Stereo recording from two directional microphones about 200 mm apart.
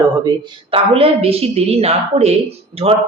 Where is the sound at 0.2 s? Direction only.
20° right (ahead or behind).